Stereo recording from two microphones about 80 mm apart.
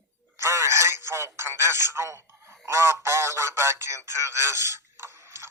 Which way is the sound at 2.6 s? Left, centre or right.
Right.